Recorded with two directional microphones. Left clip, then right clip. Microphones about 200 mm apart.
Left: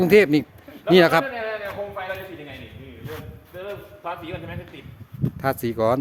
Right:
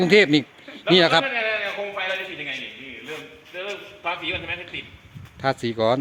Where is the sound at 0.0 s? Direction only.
10° left (ahead or behind).